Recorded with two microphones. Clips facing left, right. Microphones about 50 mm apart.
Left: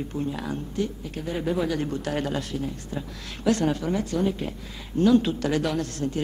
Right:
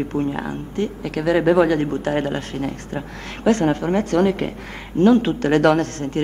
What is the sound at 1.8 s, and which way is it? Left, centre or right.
Speech, right.